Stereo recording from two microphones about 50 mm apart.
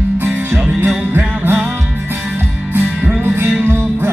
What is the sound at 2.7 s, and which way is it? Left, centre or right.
Music, right.